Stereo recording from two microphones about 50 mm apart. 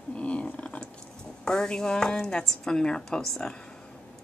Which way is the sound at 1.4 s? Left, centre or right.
Centre.